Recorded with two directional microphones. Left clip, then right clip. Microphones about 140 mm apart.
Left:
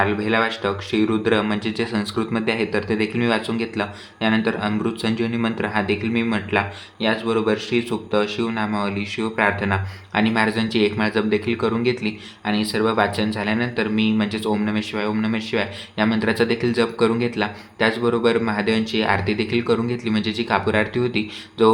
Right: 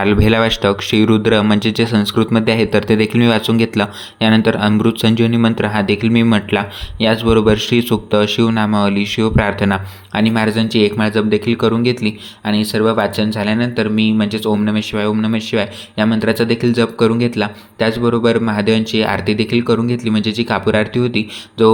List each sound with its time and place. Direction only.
0.0 s speech: 60° right (ahead or behind); by 21.7 s 35° right (ahead or behind)